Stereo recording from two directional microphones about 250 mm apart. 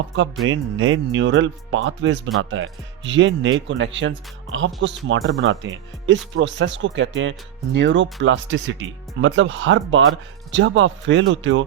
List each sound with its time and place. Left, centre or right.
0.2 s speech: right